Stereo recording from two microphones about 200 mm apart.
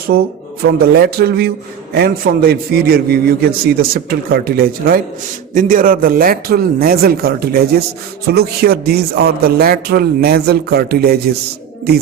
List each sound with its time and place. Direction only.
0.6 s a man's voice: 50° right (ahead or behind)